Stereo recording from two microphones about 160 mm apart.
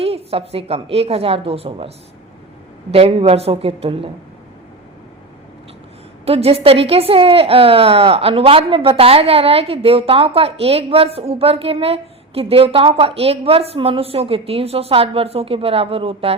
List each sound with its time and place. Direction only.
0.0 s a woman's voice: 40° right (ahead or behind)
2.9 s a woman's voice: 35° right (ahead or behind)
6.2 s a woman's voice: 40° right (ahead or behind)